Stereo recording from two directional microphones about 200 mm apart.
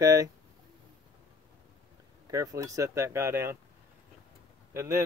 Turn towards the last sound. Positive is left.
turn(degrees=-10)  # may be behind; listen again after turning